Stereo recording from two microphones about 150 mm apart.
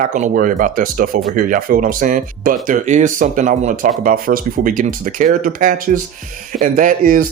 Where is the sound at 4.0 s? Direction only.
70° right (ahead or behind).